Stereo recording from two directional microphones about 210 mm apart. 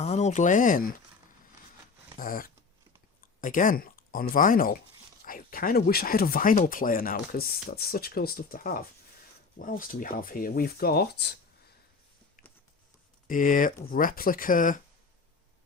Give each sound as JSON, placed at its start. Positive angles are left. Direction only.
{"t": 0.0, "sound": "speech", "side_deg": 30}
{"t": 2.1, "sound": "speech", "side_deg": 40}
{"t": 12.4, "sound": "a sound", "side_deg": 45}
{"t": 13.2, "sound": "speech", "side_deg": 40}